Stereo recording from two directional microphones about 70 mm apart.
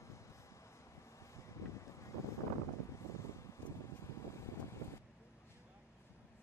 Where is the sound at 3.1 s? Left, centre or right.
Left.